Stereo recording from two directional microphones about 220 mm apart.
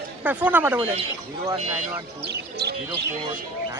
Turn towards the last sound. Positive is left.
turn(degrees=-50)  # may be behind; listen again after turning